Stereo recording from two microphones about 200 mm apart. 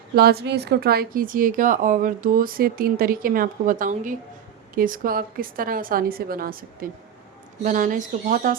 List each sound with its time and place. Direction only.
0.2 s speech: 50° right (ahead or behind)